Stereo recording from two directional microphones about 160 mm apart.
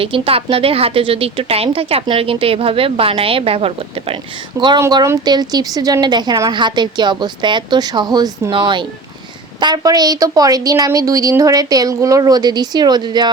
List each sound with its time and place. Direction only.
0.0 s a woman's voice: 35° right (ahead or behind)
4.8 s a woman's voice: 20° right (ahead or behind)